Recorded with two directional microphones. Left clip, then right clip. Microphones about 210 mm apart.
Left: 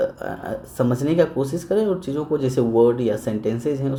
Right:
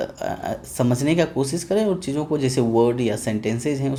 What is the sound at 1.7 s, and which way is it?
Speech, 30° right (ahead or behind).